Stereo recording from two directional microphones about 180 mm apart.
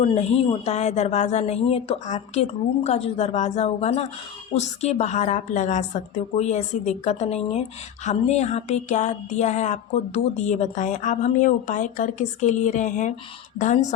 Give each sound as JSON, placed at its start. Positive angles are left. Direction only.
{"t": 0.1, "sound": "a woman's voice", "side_deg": 40}